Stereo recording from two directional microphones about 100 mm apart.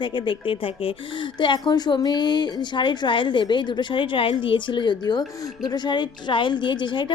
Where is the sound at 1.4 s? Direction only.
50° left (ahead or behind).